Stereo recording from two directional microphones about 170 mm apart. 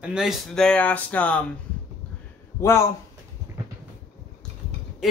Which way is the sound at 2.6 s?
15° left (ahead or behind).